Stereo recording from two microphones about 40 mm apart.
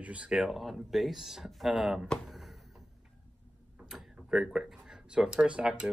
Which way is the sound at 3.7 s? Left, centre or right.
Centre.